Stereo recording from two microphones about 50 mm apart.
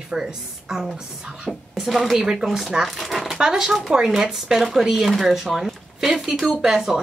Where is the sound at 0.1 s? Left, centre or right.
Centre.